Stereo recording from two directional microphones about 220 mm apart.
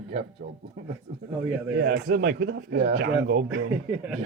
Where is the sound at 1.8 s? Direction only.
45° right (ahead or behind).